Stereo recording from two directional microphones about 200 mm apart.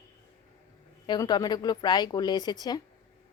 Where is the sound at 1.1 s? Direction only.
20° left (ahead or behind).